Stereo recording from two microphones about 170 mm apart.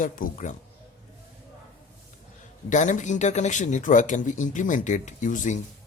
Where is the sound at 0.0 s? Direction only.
50° left (ahead or behind).